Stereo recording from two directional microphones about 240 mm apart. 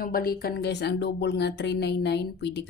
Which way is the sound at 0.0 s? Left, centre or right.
Left.